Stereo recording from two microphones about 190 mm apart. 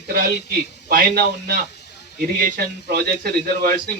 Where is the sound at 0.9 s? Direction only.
50° right (ahead or behind).